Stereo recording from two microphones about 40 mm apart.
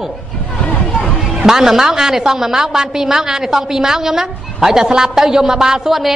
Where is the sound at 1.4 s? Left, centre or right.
Centre.